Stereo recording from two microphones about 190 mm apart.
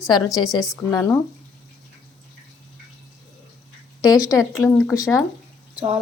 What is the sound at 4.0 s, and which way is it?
A woman's voice, 20° left (ahead or behind).